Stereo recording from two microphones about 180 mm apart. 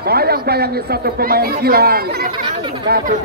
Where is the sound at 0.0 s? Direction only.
60° right (ahead or behind).